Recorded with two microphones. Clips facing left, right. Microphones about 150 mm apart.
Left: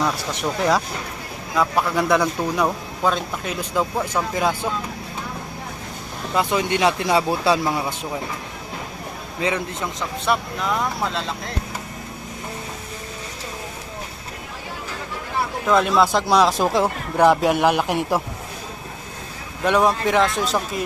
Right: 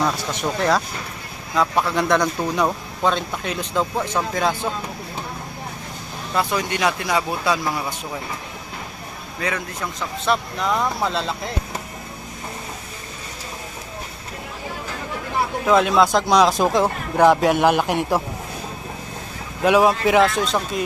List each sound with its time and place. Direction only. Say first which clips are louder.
0.0 s a man's voice: right 1 dB; 5° right (ahead or behind)
6.3 s speech: left 2 dB; 20° left (ahead or behind)
9.4 s speech: left 3 dB; 20° left (ahead or behind)
10.3 s a man's voice: right 1 dB; centre (ahead or behind)
15.6 s a man's voice: right 1 dB; centre (ahead or behind)
19.6 s a man's voice: right 2 dB; 5° right (ahead or behind)